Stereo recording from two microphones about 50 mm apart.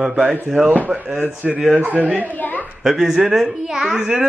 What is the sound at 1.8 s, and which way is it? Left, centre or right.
Speech, right.